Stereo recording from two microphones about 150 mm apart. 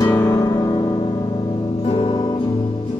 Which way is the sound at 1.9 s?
30° left (ahead or behind).